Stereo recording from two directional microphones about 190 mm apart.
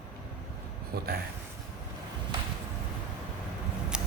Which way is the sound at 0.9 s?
55° right (ahead or behind).